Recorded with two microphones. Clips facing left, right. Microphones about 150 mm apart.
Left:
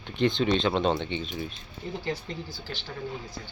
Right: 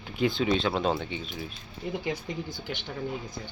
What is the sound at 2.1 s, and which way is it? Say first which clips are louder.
Speech: right 1 dB; 15° right (ahead or behind).